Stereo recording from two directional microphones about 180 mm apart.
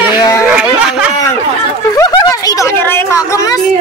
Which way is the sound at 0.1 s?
20° left (ahead or behind).